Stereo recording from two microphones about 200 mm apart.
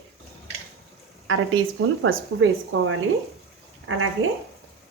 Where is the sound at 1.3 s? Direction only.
80° right.